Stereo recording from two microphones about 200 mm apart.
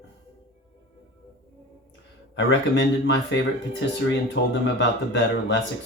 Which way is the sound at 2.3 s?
60° left (ahead or behind).